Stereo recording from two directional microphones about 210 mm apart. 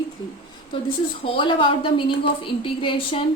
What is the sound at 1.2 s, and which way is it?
A woman's voice, 25° left (ahead or behind).